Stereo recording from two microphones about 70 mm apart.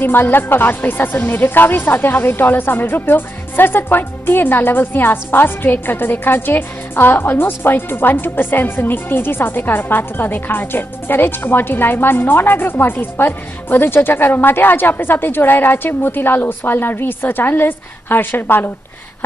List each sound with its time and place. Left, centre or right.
0.0 s a woman's voice: left